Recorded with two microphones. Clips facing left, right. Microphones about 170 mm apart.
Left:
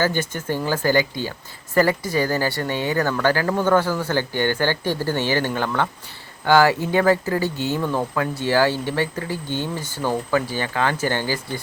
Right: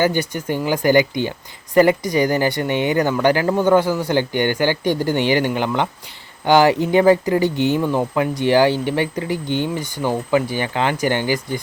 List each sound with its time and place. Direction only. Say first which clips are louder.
0.0 s speech: right 3 dB; 15° right (ahead or behind)